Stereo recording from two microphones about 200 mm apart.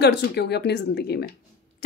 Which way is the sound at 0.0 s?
55° left (ahead or behind).